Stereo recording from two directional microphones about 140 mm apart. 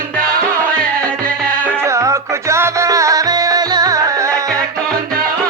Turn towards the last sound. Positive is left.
turn(degrees=-20)  # may be behind; listen again after turning